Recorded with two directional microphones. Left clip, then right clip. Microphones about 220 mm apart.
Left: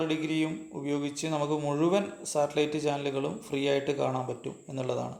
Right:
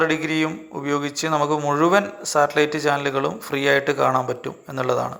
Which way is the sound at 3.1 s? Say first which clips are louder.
Right 9 dB; 30° right (ahead or behind).